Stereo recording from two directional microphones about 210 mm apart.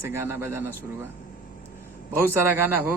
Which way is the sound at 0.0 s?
10° right (ahead or behind).